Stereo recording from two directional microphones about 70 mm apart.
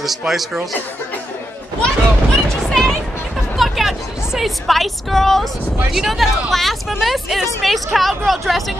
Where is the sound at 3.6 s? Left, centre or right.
Centre.